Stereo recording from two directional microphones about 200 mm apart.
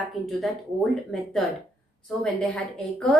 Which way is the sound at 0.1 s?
Centre (ahead or behind).